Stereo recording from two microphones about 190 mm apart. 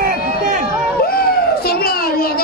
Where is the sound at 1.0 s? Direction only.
55° left (ahead or behind).